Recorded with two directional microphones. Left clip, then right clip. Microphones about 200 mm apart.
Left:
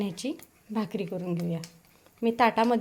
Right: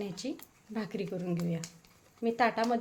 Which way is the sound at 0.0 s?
30° left (ahead or behind).